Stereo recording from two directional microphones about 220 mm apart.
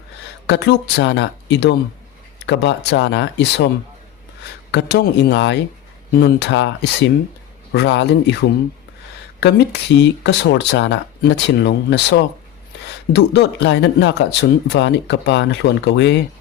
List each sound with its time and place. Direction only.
0.4 s speech: 50° left (ahead or behind)
4.7 s speech: 50° left (ahead or behind)